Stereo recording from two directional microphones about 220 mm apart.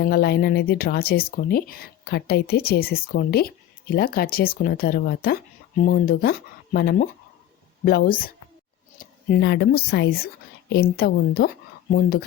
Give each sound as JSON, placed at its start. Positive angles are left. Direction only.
{"t": 0.0, "sound": "speech", "side_deg": 45}